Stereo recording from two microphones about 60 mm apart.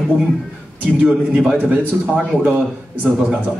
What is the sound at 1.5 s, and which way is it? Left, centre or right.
Speech, right.